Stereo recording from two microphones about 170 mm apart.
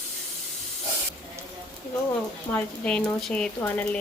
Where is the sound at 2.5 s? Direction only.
10° left (ahead or behind).